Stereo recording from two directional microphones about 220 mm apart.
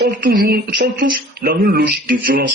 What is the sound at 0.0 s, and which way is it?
Speech, 45° right (ahead or behind).